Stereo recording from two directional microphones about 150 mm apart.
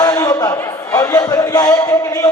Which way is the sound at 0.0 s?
25° left (ahead or behind).